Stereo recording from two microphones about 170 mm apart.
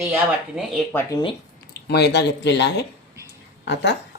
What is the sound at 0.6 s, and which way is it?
Speech, 5° right (ahead or behind).